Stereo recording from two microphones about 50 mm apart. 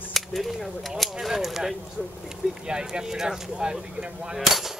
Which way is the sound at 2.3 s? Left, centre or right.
Centre.